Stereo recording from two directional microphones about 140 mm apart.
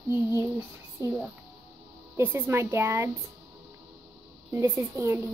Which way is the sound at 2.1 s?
15° right (ahead or behind).